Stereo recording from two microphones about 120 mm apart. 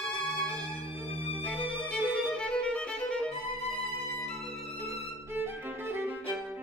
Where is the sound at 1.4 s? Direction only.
10° left (ahead or behind).